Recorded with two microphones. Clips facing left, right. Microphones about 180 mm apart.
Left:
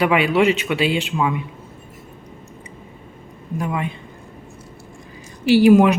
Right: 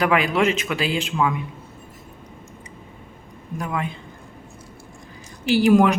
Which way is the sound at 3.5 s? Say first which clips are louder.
Left 3 dB; 5° left (ahead or behind).